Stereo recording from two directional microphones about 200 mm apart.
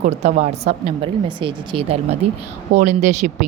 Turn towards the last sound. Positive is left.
turn(degrees=-35)  # may be behind; listen again after turning